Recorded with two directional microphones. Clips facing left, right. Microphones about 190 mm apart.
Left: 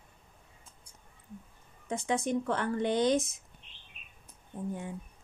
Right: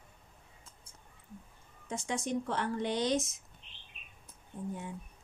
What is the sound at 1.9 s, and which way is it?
Speech, 55° left (ahead or behind).